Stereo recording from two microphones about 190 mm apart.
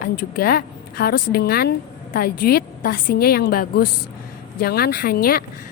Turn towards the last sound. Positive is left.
turn(degrees=50)  # may be behind; listen again after turning